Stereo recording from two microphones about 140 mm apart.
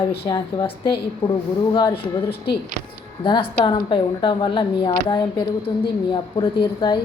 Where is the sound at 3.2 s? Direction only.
35° left (ahead or behind).